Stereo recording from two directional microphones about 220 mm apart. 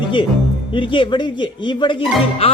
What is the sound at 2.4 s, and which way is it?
Speech, 25° left (ahead or behind).